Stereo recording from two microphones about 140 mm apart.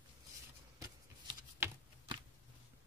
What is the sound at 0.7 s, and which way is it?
Shuffling cards, 25° right (ahead or behind).